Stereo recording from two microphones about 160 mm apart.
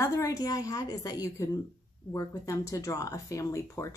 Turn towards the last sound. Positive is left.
turn(degrees=20)  # may be behind; listen again after turning